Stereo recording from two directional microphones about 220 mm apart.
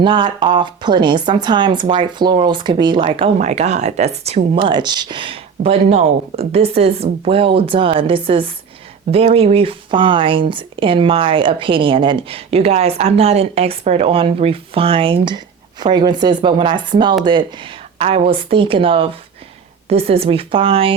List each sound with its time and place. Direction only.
0.0 s speech: 20° right (ahead or behind)